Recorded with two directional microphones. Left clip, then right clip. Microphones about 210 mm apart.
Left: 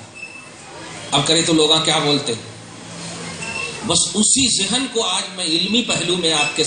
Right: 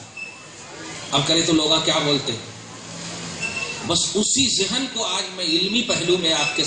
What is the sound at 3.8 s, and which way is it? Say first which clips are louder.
Speech: left 3 dB; 50° left (ahead or behind).